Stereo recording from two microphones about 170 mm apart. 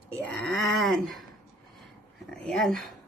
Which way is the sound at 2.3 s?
5° left (ahead or behind).